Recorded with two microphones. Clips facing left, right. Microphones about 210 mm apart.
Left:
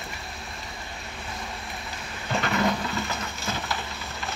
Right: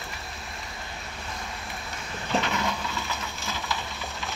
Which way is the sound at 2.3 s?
Centre (ahead or behind).